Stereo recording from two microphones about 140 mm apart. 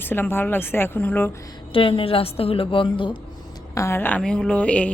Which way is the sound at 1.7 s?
40° left (ahead or behind).